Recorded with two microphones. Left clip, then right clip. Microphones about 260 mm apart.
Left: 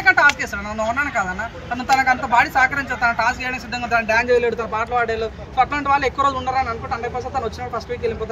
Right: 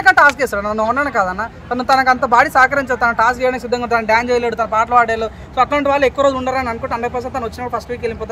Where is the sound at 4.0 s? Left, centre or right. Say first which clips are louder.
Even; centre.